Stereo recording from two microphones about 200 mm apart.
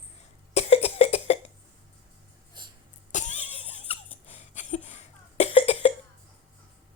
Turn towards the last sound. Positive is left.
turn(degrees=30)  # may be behind; listen again after turning